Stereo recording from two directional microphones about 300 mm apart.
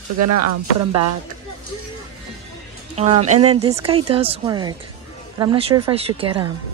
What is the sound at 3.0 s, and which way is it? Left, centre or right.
Speech, right.